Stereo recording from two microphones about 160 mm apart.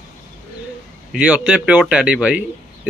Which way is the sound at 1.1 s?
10° right (ahead or behind).